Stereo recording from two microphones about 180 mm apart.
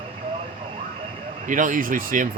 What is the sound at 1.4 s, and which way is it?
Speech, 45° right (ahead or behind).